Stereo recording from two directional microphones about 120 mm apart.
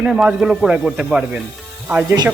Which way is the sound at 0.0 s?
5° right (ahead or behind).